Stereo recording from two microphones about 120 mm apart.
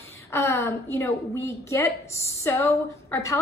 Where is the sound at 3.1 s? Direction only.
25° left (ahead or behind).